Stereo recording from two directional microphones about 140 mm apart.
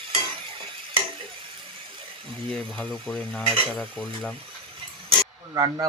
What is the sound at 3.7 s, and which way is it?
Stir, 5° left (ahead or behind).